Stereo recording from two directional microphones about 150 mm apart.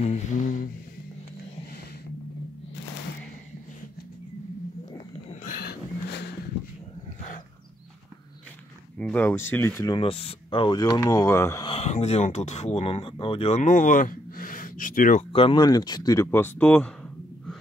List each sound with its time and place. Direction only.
0.0 s a sound: 55° left (ahead or behind)
5.3 s a sound: 65° left (ahead or behind); by 5.8 s 80° left
8.9 s speech: 10° left (ahead or behind)
9.8 s speech: 35° left (ahead or behind); by 11.6 s 20° left (ahead or behind)
11.6 s speech: 40° left (ahead or behind); by 15.2 s 65° left (ahead or behind)
15.3 s speech: 35° left (ahead or behind)
16.3 s speech: 15° left (ahead or behind)